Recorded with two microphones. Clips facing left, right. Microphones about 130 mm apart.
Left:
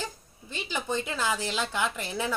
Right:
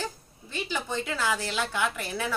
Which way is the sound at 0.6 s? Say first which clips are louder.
Even; 15° left (ahead or behind).